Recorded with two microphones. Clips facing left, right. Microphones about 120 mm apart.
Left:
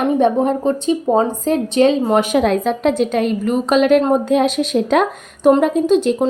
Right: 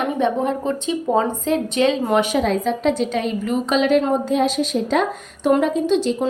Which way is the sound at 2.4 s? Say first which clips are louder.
Left 4 dB; 60° left (ahead or behind).